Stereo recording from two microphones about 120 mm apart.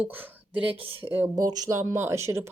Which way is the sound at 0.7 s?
50° right (ahead or behind).